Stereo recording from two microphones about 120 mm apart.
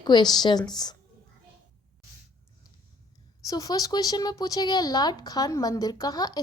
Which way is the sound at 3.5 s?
30° left (ahead or behind).